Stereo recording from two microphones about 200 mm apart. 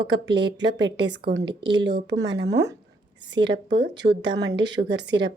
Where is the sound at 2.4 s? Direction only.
60° right (ahead or behind).